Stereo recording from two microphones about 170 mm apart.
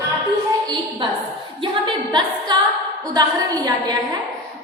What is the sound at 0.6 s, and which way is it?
A woman's voice, 25° right (ahead or behind).